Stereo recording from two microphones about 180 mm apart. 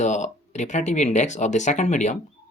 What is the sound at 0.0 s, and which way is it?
Speech, 40° left (ahead or behind).